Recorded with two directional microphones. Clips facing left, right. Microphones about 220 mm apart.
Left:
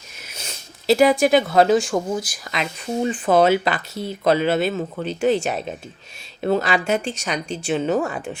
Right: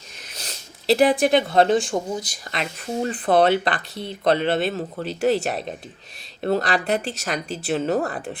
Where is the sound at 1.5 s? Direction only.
Centre (ahead or behind).